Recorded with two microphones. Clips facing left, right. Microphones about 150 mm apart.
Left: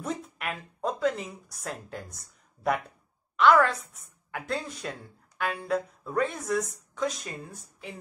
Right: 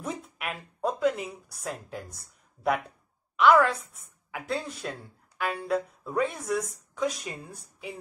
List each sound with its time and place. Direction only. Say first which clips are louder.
0.0 s speech: left 1 dB; 5° right (ahead or behind)